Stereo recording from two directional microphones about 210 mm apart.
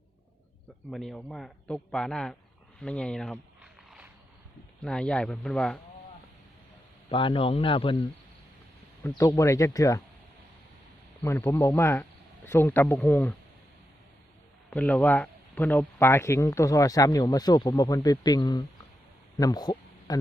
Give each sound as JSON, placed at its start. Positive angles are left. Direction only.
{"t": 0.9, "sound": "a man's voice", "side_deg": 0}
{"t": 2.8, "sound": "a sound", "side_deg": 5}
{"t": 4.8, "sound": "a man's voice", "side_deg": 5}
{"t": 7.1, "sound": "speech", "side_deg": 25}
{"t": 9.0, "sound": "speech", "side_deg": 15}
{"t": 11.2, "sound": "speech", "side_deg": 15}
{"t": 14.7, "sound": "speech", "side_deg": 5}
{"t": 19.4, "sound": "a sound", "side_deg": 20}